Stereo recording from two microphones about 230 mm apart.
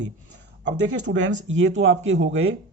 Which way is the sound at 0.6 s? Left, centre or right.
Right.